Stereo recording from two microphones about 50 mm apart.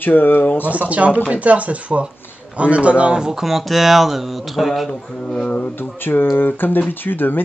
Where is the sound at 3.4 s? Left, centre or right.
Centre.